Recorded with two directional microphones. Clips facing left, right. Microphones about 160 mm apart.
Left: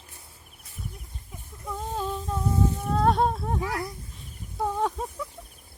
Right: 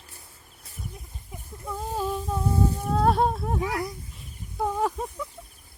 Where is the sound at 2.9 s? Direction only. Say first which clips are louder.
Even; 5° right (ahead or behind).